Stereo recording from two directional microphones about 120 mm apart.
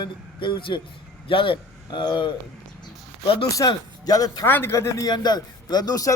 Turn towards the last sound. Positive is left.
turn(degrees=30)  # may be behind; listen again after turning